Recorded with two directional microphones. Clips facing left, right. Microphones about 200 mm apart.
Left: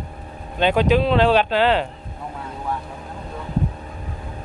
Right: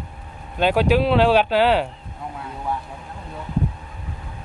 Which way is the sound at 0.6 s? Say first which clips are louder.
Even; 5° right (ahead or behind).